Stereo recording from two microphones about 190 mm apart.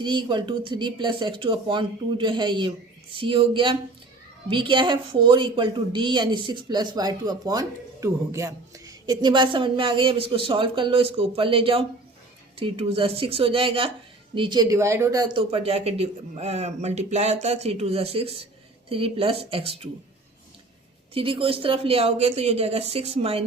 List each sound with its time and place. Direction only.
0.0 s a woman's voice: 25° right (ahead or behind)
21.1 s speech: 30° right (ahead or behind)